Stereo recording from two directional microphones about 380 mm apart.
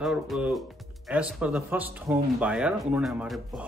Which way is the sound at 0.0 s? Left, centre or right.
Centre.